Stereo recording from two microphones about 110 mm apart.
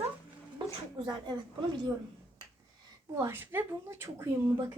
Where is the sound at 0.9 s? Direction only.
40° right (ahead or behind).